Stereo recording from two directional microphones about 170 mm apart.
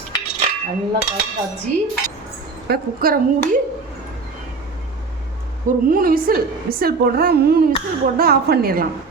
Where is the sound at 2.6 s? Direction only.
65° right (ahead or behind).